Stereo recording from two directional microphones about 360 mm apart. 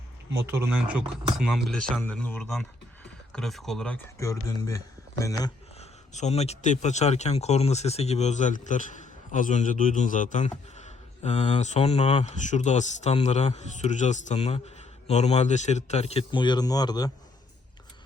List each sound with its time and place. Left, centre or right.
0.3 s a man's voice: centre